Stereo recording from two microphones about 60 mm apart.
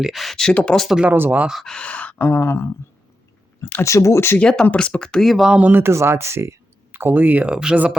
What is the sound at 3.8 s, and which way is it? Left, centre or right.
Speech, left.